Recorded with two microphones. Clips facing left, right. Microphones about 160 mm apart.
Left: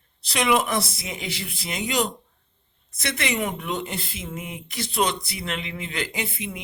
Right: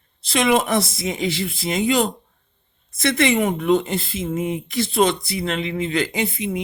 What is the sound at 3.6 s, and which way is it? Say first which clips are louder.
Speech: right 11 dB; 25° right (ahead or behind).